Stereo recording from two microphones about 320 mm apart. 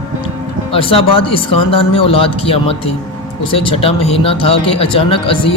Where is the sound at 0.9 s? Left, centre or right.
Centre.